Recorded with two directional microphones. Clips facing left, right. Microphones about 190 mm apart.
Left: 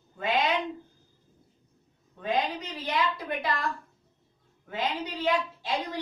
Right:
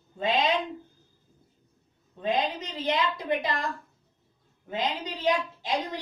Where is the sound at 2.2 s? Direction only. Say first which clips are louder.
Right 1 dB; 20° right (ahead or behind).